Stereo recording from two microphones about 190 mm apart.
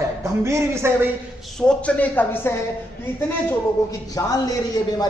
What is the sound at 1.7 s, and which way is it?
Speech, 5° left (ahead or behind).